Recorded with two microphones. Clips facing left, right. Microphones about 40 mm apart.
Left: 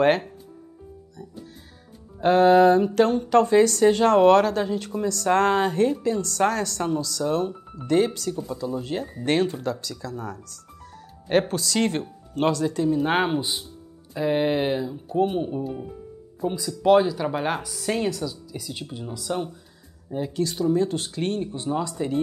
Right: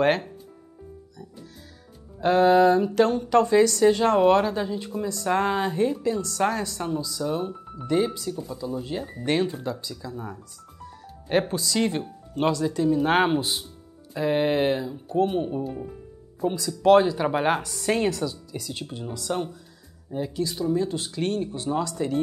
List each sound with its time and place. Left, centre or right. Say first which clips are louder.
2.1 s speech: left 2 dB; left
7.3 s speech: left 4 dB; left
8.6 s speech: left 1 dB; left
9.6 s speech: left 3 dB; left
11.4 s speech: left 1 dB; left
12.9 s speech: right 4 dB; centre
17.0 s a woman's voice: right 2 dB; centre
17.6 s a woman's voice: right 2 dB; centre
20.5 s speech: left 3 dB; left
21.1 s speech: even; left
22.0 s speech: even; centre